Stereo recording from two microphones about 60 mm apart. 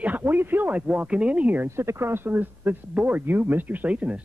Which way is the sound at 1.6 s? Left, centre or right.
Right.